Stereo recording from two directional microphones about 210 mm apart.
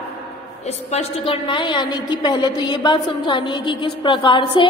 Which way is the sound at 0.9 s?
25° left (ahead or behind).